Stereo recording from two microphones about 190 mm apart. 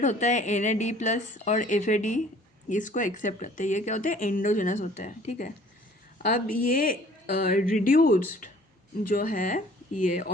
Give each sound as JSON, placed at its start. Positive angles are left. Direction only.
{"t": 0.0, "sound": "speech", "side_deg": 40}
{"t": 6.7, "sound": "speech", "side_deg": 50}